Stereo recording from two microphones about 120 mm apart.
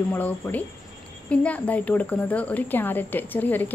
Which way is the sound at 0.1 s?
15° left (ahead or behind).